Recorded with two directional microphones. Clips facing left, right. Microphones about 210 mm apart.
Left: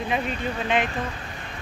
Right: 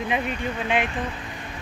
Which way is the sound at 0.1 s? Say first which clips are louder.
Left 1 dB; 10° right (ahead or behind).